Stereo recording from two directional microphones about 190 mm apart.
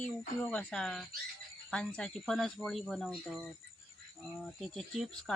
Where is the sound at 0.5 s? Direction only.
5° left (ahead or behind).